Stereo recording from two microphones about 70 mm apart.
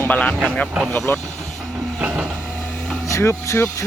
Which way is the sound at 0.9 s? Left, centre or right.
Left.